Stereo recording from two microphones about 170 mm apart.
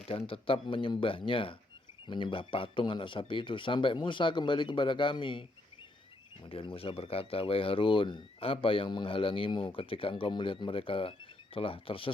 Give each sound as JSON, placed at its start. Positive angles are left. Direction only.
{"t": 0.1, "sound": "speech", "side_deg": 35}
{"t": 6.5, "sound": "speech", "side_deg": 30}